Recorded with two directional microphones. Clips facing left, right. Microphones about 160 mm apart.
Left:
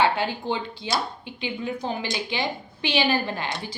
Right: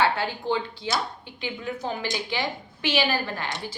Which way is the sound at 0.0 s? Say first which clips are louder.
Left 2 dB; 15° left (ahead or behind).